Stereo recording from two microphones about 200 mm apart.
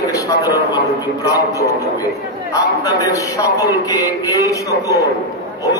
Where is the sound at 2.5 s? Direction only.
15° left (ahead or behind).